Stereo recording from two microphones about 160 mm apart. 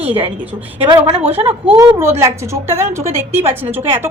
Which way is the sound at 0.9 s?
35° right (ahead or behind).